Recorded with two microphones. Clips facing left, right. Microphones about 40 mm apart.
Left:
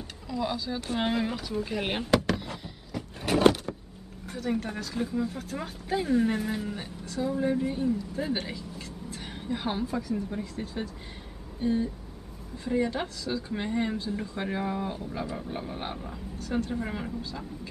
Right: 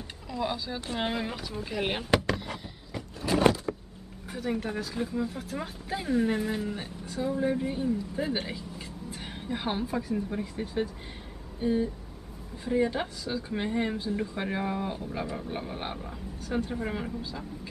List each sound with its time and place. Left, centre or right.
0.3 s speech: centre
3.2 s power windows: left
4.3 s speech: centre